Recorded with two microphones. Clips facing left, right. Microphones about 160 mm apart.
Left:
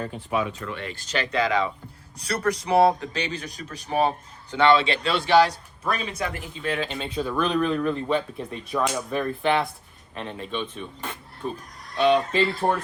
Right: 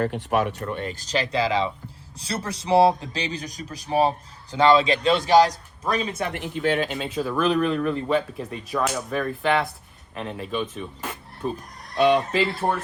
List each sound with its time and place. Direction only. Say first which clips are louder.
0.0 s speech: right 4 dB; 75° right (ahead or behind)
0.6 s speech: right 4 dB; 40° right (ahead or behind)
6.4 s speech: right 6 dB; 70° right (ahead or behind)
6.8 s speech: right 2 dB; 5° right (ahead or behind)